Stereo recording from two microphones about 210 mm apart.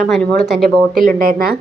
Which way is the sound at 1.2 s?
45° right (ahead or behind).